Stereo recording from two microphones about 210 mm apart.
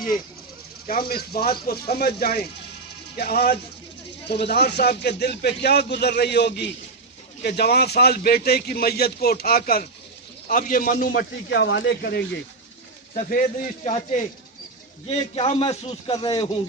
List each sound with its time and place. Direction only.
0.9 s a man's voice: 45° left (ahead or behind)
13.1 s a man's voice: 40° left (ahead or behind)
16.1 s a man's voice: 20° left (ahead or behind)